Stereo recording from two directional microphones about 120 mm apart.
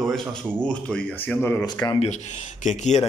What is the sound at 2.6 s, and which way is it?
Speech, 85° left.